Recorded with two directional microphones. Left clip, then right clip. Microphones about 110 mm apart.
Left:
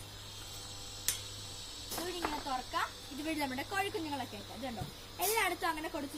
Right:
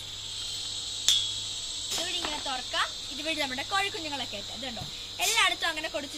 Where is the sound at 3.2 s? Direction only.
20° right (ahead or behind).